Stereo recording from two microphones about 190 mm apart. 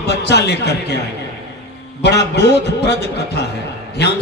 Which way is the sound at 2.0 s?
60° left (ahead or behind).